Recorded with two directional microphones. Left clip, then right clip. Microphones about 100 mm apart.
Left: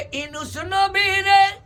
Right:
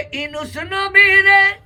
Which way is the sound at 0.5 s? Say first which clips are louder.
Left 4 dB; 30° left (ahead or behind).